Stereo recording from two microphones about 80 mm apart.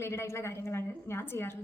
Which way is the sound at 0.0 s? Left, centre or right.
Left.